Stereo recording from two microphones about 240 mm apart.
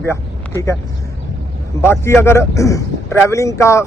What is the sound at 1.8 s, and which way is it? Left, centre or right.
A man's voice, centre.